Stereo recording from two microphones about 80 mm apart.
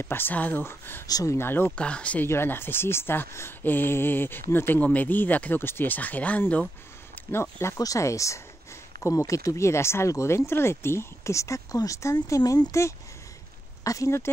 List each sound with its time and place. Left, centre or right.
0.0 s speech: left
1.0 s speech: left
1.3 s speech: left
1.8 s speech: centre
2.2 s speech: left
7.2 s a sound: left
7.5 s speech: left
12.4 s speech: left
13.8 s speech: left